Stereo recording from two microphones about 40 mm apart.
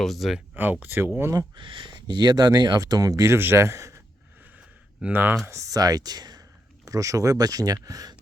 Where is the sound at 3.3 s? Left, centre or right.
Right.